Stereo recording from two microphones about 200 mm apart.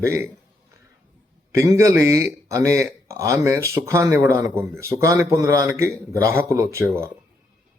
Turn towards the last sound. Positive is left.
turn(degrees=-15)  # may be behind; listen again after turning